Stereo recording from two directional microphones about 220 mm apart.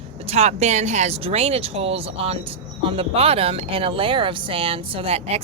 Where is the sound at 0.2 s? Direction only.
30° right (ahead or behind).